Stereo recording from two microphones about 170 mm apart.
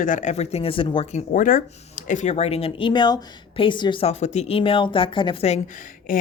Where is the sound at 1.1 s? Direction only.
50° left (ahead or behind).